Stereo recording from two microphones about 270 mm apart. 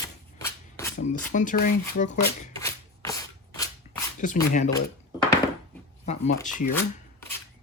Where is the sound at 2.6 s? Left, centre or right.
Centre.